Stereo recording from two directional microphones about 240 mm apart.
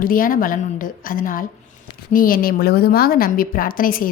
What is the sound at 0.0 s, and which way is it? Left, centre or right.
A woman's voice, left.